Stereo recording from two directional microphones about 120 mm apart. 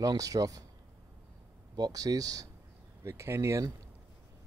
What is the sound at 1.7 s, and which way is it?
Speech, 30° right (ahead or behind).